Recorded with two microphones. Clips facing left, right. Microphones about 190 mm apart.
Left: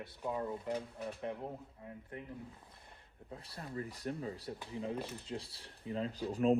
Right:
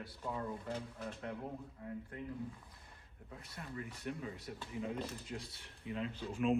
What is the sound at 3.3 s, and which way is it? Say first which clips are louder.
Speech: left 3 dB; 30° left (ahead or behind).